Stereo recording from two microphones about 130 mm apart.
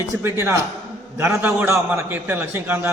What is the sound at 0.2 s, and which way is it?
A man's voice, 20° right (ahead or behind).